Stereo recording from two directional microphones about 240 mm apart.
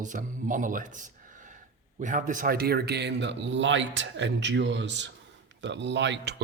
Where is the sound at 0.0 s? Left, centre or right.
Right.